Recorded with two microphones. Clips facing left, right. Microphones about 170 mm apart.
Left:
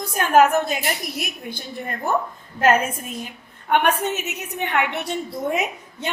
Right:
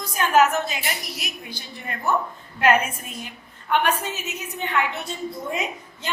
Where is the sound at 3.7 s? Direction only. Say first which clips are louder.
Left 3 dB; 60° left (ahead or behind).